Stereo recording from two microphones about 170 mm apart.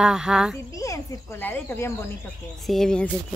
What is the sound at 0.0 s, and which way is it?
Speech, 5° right (ahead or behind).